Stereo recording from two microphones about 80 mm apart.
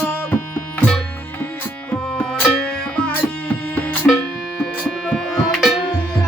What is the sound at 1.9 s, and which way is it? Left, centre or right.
Music, centre.